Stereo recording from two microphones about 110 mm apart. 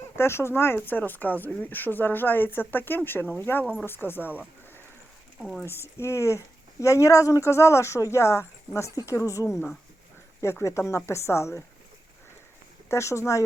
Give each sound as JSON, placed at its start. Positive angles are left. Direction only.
{"t": 0.2, "sound": "speech", "side_deg": 25}
{"t": 5.4, "sound": "speech", "side_deg": 0}
{"t": 5.8, "sound": "speech", "side_deg": 25}
{"t": 12.9, "sound": "speech", "side_deg": 25}